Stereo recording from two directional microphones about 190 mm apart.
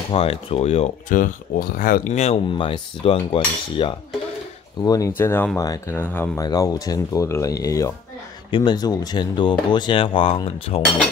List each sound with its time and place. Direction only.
0.1 s speech: 30° left (ahead or behind)